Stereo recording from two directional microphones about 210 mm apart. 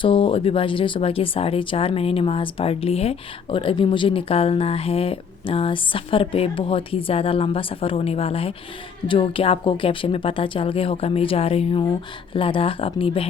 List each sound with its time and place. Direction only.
0.0 s speech: 25° left (ahead or behind)